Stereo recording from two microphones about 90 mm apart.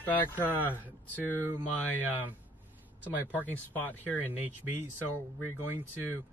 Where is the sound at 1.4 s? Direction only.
20° right (ahead or behind).